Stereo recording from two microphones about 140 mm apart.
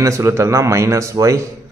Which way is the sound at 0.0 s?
20° right (ahead or behind).